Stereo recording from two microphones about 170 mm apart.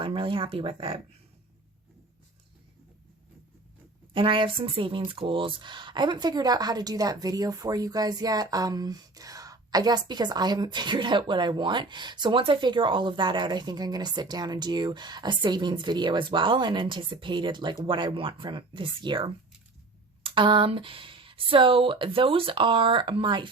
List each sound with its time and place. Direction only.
0.0 s speech: 30° right (ahead or behind)
4.1 s speech: 30° right (ahead or behind)